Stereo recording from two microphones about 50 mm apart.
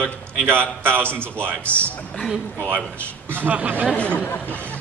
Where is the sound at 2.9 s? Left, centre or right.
Right.